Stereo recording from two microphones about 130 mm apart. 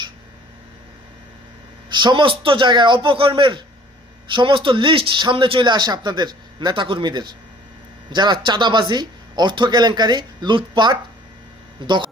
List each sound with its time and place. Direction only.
1.9 s speech: 35° right (ahead or behind)